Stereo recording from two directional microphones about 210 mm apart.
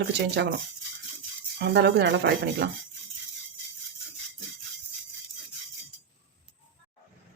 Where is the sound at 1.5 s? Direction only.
50° right (ahead or behind).